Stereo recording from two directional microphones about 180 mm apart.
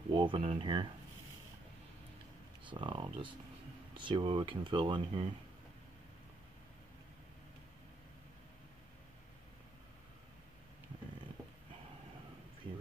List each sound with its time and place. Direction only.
0.1 s speech: 25° right (ahead or behind)
2.7 s speech: 25° right (ahead or behind)